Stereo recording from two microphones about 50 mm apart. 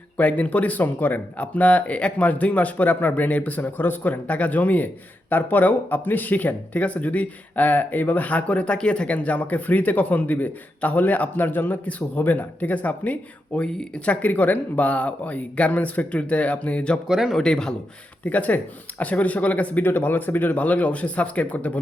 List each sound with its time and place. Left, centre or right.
0.2 s speech: left
17.1 s speech: centre
17.3 s speech: centre
18.3 s speech: left
19.8 s speech: left